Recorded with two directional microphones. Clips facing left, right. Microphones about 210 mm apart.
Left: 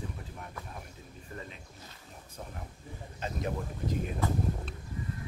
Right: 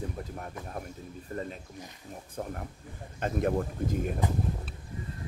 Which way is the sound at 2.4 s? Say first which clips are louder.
Right 8 dB; 55° right (ahead or behind).